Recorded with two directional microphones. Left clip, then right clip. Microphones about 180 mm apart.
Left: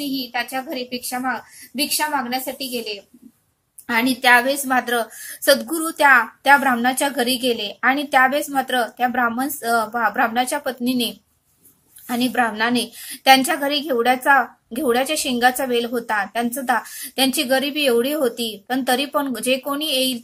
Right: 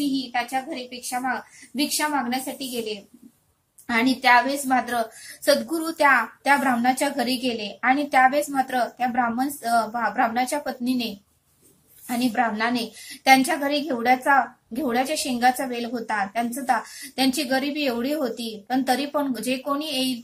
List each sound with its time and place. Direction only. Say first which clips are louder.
0.0 s a woman's voice: left 1 dB; 25° left (ahead or behind)
4.2 s a woman's voice: left 3 dB; 25° left (ahead or behind)
12.1 s a woman's voice: left 3 dB; 25° left (ahead or behind)